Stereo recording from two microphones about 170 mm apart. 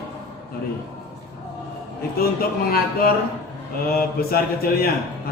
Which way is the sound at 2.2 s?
65° left (ahead or behind).